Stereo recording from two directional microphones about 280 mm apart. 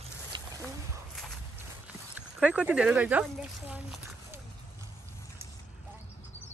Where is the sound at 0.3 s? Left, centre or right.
Centre.